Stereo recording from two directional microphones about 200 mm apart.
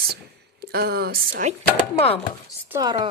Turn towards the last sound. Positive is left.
turn(degrees=-20)  # may be behind; listen again after turning